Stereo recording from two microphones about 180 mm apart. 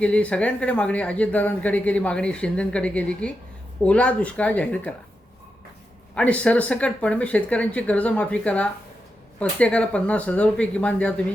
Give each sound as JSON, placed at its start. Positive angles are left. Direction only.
{"t": 0.0, "sound": "speech", "side_deg": 5}
{"t": 6.1, "sound": "speech", "side_deg": 5}